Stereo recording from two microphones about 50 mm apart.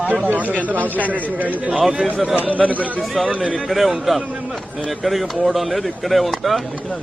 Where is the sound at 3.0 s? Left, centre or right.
Centre.